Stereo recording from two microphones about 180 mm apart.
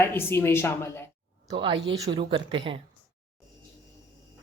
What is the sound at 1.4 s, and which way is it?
A woman's voice, 30° right (ahead or behind).